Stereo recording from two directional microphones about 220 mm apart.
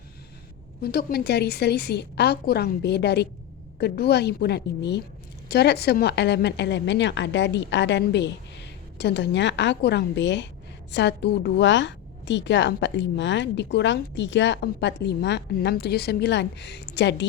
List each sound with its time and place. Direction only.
0.8 s a woman's voice: 45° left (ahead or behind)